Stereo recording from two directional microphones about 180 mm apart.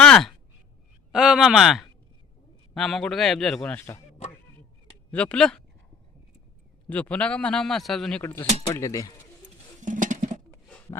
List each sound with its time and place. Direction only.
0.0 s a sound: 5° left (ahead or behind)
1.1 s a man's voice: 5° right (ahead or behind); by 4.0 s 10° left (ahead or behind)
5.1 s a man's voice: 5° left (ahead or behind)
6.8 s a man's voice: 5° left (ahead or behind)
8.2 s speech: 10° left (ahead or behind)
9.8 s a sound: 45° right (ahead or behind)